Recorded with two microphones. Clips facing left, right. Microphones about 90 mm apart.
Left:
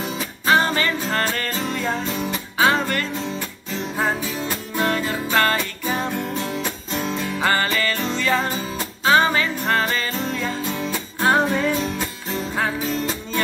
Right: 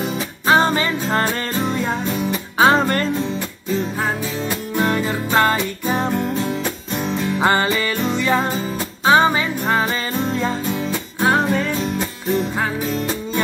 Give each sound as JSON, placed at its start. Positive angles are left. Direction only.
{"t": 0.5, "sound": "music", "side_deg": -25}
{"t": 2.6, "sound": "music", "side_deg": -30}
{"t": 4.7, "sound": "music", "side_deg": -5}
{"t": 5.3, "sound": "music", "side_deg": -15}
{"t": 6.1, "sound": "music", "side_deg": -5}
{"t": 7.3, "sound": "music", "side_deg": -25}
{"t": 10.7, "sound": "music", "side_deg": 0}